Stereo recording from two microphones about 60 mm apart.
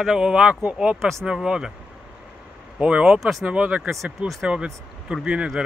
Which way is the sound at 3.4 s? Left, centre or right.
Centre.